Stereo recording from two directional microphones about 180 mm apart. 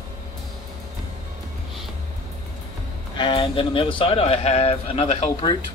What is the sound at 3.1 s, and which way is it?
Speech, 25° left (ahead or behind).